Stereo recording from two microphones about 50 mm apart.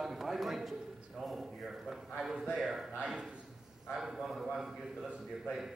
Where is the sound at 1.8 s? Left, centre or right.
Centre.